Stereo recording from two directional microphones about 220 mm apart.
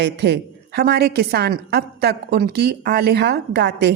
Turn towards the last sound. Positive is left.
turn(degrees=-50)  # may be behind; listen again after turning